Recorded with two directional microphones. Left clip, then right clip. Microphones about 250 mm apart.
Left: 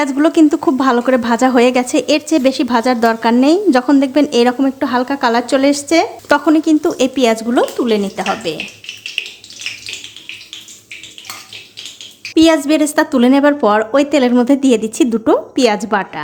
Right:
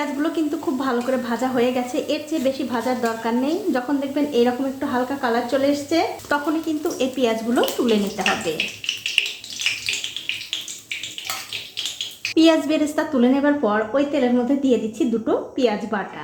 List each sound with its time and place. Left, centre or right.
0.0 s a woman's voice: left
9.2 s a sound: centre
12.3 s a woman's voice: left